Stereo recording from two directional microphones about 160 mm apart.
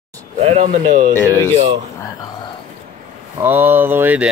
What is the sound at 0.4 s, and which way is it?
Speech, 40° right (ahead or behind).